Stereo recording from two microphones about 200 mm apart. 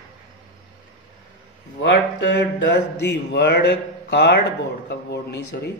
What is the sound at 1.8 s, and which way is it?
Speech, 65° left (ahead or behind).